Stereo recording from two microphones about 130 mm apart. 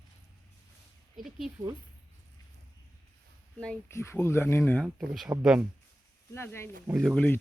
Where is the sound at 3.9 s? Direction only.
20° left (ahead or behind).